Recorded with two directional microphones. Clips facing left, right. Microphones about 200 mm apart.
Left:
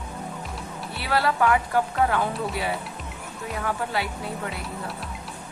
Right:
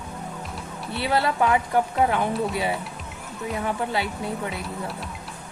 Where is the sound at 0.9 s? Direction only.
20° right (ahead or behind).